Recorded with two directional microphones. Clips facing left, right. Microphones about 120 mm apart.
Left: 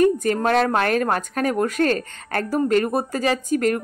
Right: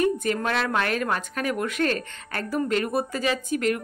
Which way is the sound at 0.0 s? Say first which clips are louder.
Left 6 dB; 40° left (ahead or behind).